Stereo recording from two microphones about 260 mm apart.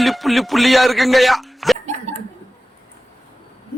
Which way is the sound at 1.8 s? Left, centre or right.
Right.